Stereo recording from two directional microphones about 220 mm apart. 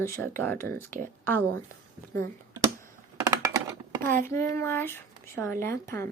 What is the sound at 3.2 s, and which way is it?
Computer keyboard, 15° right (ahead or behind).